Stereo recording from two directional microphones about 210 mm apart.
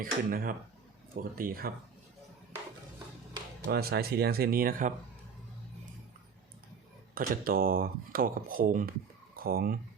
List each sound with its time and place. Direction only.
0.0 s speech: 40° right (ahead or behind)
3.7 s speech: 50° right (ahead or behind)
7.1 s speech: 45° right (ahead or behind)